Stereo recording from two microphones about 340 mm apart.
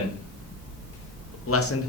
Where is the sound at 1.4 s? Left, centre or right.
Left.